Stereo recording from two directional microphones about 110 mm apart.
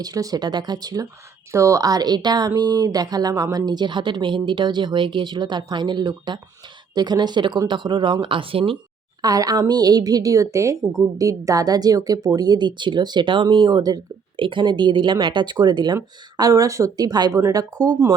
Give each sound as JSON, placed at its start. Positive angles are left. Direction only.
{"t": 0.0, "sound": "a woman's voice", "side_deg": -35}
{"t": 9.2, "sound": "a woman's voice", "side_deg": -35}
{"t": 16.4, "sound": "a woman's voice", "side_deg": -30}